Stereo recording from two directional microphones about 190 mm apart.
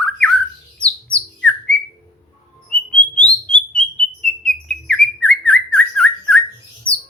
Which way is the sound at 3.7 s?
5° left (ahead or behind).